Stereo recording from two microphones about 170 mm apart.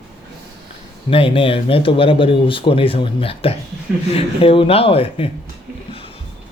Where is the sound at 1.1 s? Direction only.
30° left (ahead or behind).